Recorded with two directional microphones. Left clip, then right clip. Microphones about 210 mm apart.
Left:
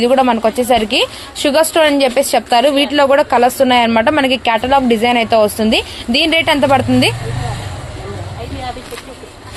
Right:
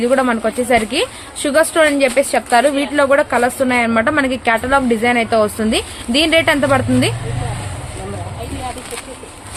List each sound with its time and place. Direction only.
0.0 s a woman's voice: 10° left (ahead or behind)